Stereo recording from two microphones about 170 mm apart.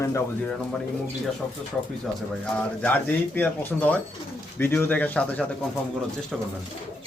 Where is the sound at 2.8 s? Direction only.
10° left (ahead or behind).